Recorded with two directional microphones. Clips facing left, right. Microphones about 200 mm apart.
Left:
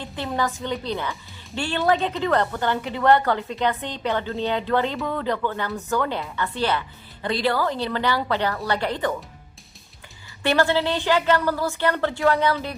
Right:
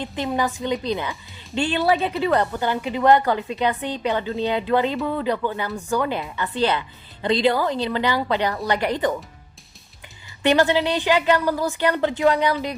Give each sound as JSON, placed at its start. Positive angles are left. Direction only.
{"t": 0.0, "sound": "speech", "side_deg": -15}
{"t": 10.4, "sound": "speech", "side_deg": -15}